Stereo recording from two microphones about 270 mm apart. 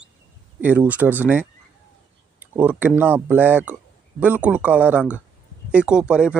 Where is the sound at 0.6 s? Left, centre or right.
Centre.